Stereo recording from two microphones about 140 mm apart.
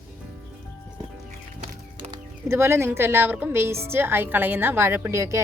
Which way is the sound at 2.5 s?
15° right (ahead or behind).